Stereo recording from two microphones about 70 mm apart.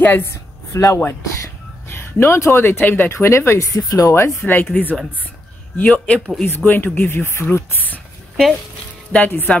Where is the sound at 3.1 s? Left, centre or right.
Left.